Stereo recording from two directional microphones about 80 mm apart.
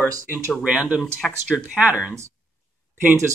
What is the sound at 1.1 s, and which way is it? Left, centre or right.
Speech, centre.